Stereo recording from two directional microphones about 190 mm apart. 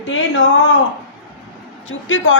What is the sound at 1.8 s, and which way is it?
Speech, 90° left.